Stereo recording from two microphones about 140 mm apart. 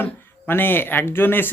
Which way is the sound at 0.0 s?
15° left (ahead or behind).